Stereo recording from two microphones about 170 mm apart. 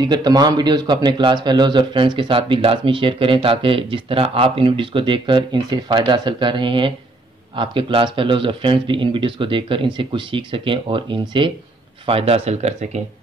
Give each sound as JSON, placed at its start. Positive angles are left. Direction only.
{"t": 0.0, "sound": "a man's voice", "side_deg": -25}